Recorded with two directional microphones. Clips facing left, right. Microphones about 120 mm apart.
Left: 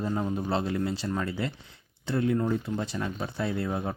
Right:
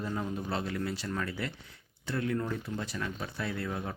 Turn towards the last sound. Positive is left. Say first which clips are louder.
# left 5 dB
turn(degrees=30)  # may be behind; listen again after turning